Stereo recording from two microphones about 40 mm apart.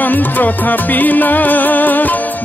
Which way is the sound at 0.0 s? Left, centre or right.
Left.